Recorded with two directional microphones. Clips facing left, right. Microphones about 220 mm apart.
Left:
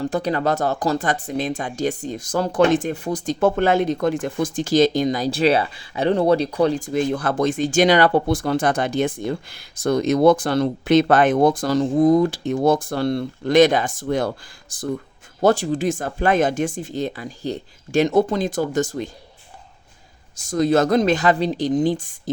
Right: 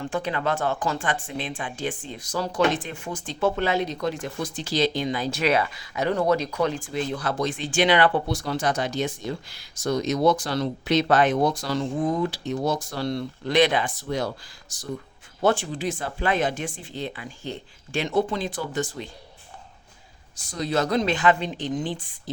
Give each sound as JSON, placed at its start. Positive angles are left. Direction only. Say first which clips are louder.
{"t": 0.0, "sound": "speech", "louder": "left 6 dB", "side_deg": 40}
{"t": 7.1, "sound": "speech", "louder": "left 6 dB", "side_deg": 50}
{"t": 15.4, "sound": "speech", "louder": "left 5 dB", "side_deg": 40}
{"t": 20.3, "sound": "speech", "louder": "left 8 dB", "side_deg": 45}